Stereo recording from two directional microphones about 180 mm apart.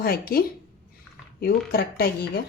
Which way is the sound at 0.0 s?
55° left (ahead or behind).